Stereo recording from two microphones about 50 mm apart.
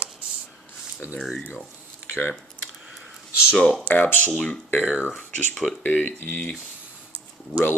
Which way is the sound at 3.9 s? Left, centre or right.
Left.